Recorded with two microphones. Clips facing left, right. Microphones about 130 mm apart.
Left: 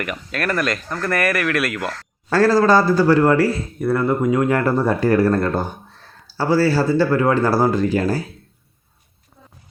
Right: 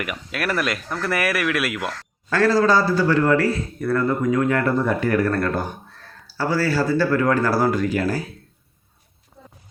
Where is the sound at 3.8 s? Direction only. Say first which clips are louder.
Left 3 dB; 20° left (ahead or behind).